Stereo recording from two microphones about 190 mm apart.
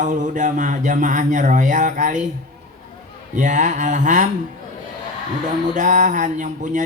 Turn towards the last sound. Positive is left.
turn(degrees=-40)  # may be behind; listen again after turning